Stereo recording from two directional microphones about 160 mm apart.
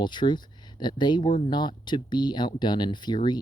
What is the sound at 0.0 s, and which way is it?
Speech, 30° left (ahead or behind).